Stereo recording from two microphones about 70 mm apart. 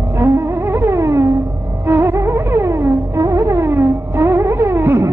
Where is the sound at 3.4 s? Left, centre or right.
Right.